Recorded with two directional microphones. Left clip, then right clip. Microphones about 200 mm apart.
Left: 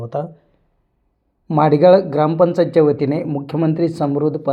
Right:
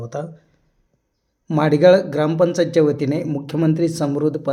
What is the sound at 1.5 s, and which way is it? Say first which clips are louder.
Speech: left 2 dB; centre (ahead or behind).